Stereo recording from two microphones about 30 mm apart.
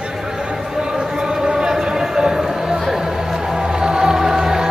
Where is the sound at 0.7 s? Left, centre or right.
Right.